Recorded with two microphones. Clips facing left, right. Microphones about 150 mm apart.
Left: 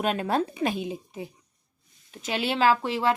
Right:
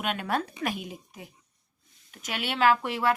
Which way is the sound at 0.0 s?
35° left (ahead or behind).